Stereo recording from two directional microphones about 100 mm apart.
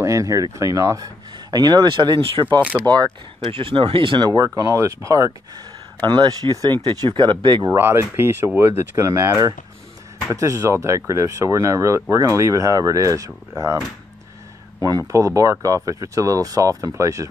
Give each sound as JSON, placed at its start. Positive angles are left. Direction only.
{"t": 0.0, "sound": "speech", "side_deg": -35}
{"t": 2.8, "sound": "speech", "side_deg": -40}
{"t": 3.4, "sound": "speech", "side_deg": -65}
{"t": 4.4, "sound": "speech", "side_deg": -35}
{"t": 5.9, "sound": "speech", "side_deg": -45}
{"t": 7.6, "sound": "speech", "side_deg": -25}
{"t": 14.9, "sound": "speech", "side_deg": -35}